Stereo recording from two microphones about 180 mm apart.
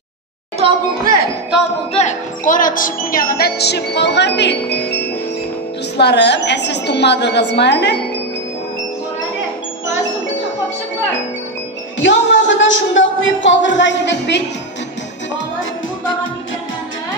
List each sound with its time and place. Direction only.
0.6 s a woman's voice: 30° right (ahead or behind)
2.0 s speech: 45° left (ahead or behind); by 8.0 s 70° left (ahead or behind)
12.0 s speech: 90° left; by 14.4 s 75° left (ahead or behind)